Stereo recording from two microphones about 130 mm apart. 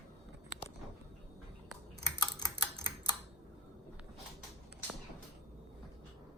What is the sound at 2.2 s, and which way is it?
Typing, 30° left (ahead or behind).